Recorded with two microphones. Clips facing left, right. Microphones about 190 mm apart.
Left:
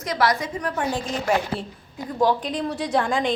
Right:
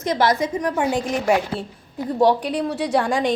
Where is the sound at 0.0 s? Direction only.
25° right (ahead or behind).